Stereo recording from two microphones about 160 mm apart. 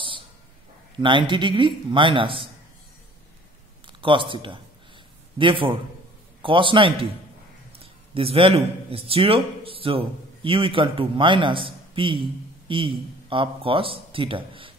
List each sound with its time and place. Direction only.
0.9 s a man's voice: 30° right (ahead or behind)
3.8 s a man's voice: 30° right (ahead or behind)